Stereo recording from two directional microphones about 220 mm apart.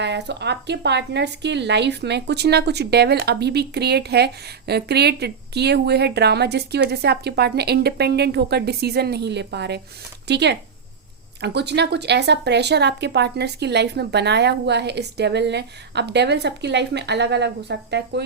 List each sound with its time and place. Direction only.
0.0 s speech: 50° right (ahead or behind)